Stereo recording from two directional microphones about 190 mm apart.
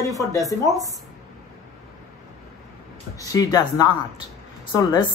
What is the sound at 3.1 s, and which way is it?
A man's voice, 15° left (ahead or behind).